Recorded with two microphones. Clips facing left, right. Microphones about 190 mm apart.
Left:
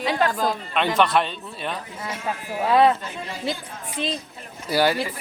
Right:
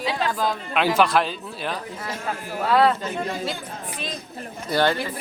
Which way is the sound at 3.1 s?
50° right (ahead or behind).